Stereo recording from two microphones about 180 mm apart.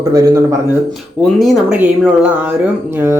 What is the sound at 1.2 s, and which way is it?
Speech, centre (ahead or behind).